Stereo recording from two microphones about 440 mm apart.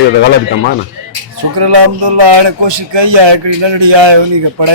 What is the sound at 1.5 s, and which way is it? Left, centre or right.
Speech, right.